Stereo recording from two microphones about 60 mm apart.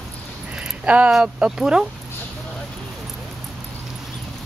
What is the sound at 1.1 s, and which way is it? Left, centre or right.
Speech, centre.